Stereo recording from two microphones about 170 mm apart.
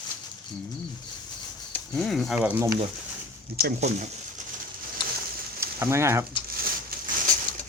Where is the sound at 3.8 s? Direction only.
45° right (ahead or behind).